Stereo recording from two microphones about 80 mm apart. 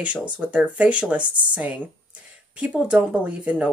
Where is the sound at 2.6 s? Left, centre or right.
Centre.